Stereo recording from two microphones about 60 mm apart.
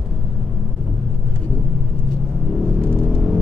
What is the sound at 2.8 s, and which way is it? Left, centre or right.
Vehicle, centre.